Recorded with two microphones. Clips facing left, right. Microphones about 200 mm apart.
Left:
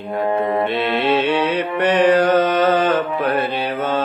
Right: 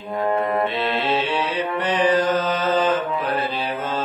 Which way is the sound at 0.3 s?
20° left (ahead or behind).